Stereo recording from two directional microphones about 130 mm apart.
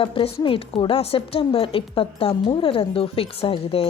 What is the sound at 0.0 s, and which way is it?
Speech, 45° left (ahead or behind).